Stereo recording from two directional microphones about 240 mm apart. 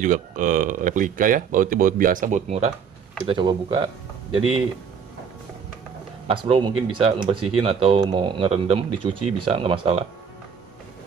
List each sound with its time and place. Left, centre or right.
0.0 s speech: right
6.2 s speech: right